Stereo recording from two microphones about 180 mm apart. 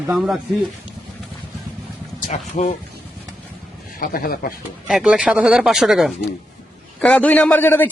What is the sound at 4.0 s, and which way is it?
Speech, 55° left (ahead or behind).